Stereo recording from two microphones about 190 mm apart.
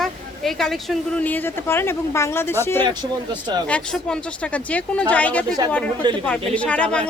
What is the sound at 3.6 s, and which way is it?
Speech, 5° left (ahead or behind).